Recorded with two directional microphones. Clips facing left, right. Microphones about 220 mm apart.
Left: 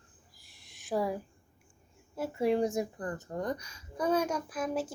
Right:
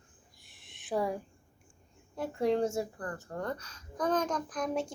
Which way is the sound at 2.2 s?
5° left (ahead or behind).